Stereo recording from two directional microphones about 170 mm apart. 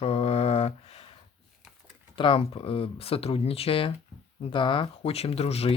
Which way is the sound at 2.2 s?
30° left (ahead or behind).